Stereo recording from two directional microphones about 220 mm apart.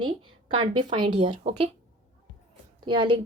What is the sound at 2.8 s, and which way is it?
Speech, 20° right (ahead or behind).